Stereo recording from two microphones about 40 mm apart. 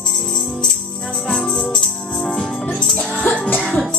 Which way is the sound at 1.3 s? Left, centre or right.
Centre.